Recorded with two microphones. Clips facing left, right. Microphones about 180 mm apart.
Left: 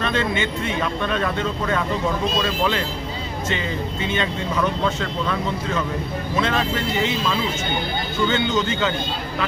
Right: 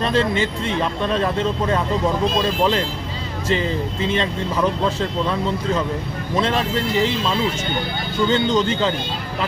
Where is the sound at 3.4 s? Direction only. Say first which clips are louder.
Right 6 dB; 35° right (ahead or behind).